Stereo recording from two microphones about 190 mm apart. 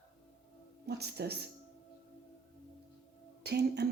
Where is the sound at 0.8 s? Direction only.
60° right (ahead or behind).